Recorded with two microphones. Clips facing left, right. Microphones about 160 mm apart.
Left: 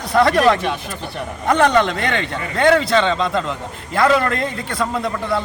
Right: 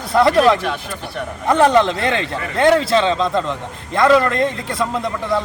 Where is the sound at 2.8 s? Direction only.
Centre (ahead or behind).